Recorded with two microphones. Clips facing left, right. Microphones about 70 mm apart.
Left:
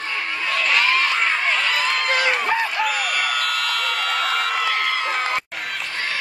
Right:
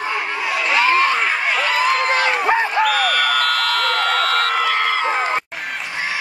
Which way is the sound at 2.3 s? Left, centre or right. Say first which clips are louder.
Right 4 dB; right.